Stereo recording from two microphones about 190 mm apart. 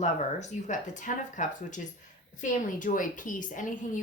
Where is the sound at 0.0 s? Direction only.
40° left (ahead or behind).